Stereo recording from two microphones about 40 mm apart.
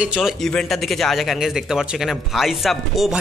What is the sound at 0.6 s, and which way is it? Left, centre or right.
A man's voice, centre.